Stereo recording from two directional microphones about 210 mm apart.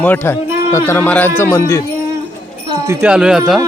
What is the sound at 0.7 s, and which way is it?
Speech, 10° left (ahead or behind).